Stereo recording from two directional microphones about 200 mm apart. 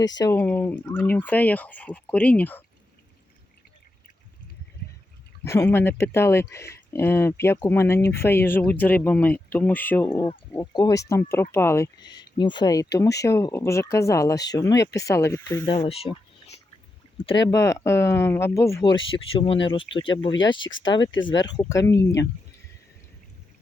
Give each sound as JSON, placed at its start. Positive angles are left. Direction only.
{"t": 0.2, "sound": "speech", "side_deg": 15}
{"t": 5.4, "sound": "speech", "side_deg": 10}
{"t": 15.8, "sound": "a sound", "side_deg": 30}
{"t": 17.5, "sound": "speech", "side_deg": 15}